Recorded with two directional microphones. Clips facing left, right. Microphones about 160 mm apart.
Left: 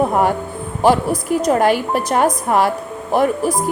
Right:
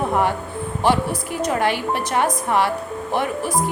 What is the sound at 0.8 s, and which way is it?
A woman's voice, 40° left (ahead or behind).